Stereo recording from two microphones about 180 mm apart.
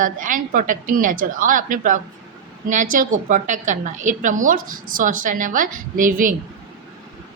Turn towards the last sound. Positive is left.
turn(degrees=-50)  # may be behind; listen again after turning